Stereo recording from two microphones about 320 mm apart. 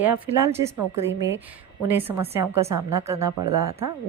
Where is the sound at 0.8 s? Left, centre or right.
Right.